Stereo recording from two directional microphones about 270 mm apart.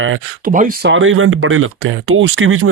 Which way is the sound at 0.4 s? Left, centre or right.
Right.